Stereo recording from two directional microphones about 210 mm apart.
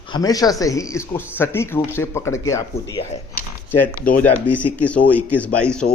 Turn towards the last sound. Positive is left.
turn(degrees=5)  # may be behind; listen again after turning